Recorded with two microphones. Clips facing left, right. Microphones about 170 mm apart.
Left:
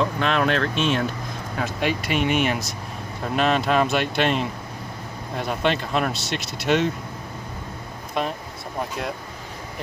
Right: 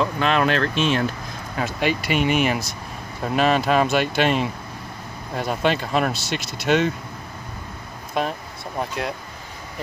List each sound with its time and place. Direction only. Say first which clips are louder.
0.0 s speech: right 1 dB; centre (ahead or behind)
8.2 s speech: right 2 dB; centre (ahead or behind)